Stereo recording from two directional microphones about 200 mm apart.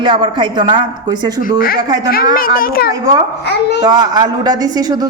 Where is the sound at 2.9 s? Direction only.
20° right (ahead or behind).